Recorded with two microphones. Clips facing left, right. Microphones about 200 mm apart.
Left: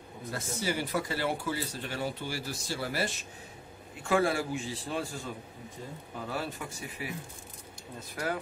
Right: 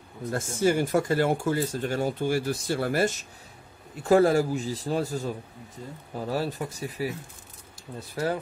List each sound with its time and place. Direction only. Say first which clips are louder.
0.3 s speech: right 9 dB; 50° right (ahead or behind)
3.9 s a man's voice: right 8 dB; 40° right (ahead or behind)
8.1 s speech: right 6 dB; 30° right (ahead or behind)